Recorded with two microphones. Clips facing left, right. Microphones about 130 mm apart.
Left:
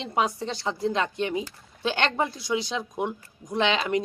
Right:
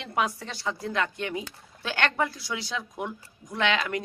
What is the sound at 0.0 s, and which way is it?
Speech, 20° left (ahead or behind).